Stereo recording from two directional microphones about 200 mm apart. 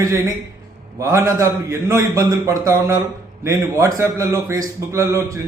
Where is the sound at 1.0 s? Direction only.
15° right (ahead or behind).